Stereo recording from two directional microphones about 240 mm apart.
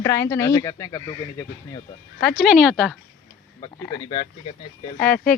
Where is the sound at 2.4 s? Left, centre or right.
Centre.